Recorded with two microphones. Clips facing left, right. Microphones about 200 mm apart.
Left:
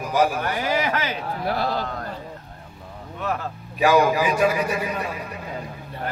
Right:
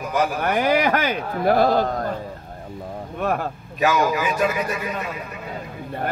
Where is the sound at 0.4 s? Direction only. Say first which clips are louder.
Right 5 dB; 60° right (ahead or behind); by 2.0 s 45° right (ahead or behind).